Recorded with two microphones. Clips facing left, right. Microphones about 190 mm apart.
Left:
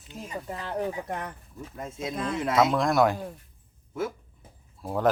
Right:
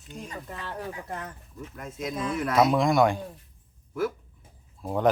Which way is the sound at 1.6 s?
30° left (ahead or behind).